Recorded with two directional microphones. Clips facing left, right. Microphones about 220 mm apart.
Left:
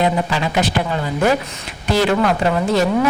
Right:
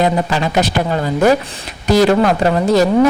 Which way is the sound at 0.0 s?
40° right (ahead or behind).